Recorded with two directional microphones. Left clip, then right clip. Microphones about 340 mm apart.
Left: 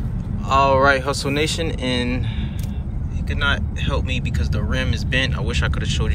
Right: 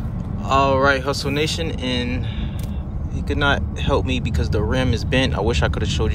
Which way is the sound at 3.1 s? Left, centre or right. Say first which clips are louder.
Right 2 dB; centre.